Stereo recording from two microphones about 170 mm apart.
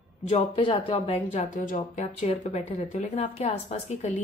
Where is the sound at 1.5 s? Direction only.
45° left (ahead or behind).